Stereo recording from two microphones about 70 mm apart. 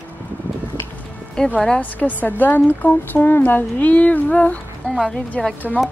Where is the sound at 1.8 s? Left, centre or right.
Left.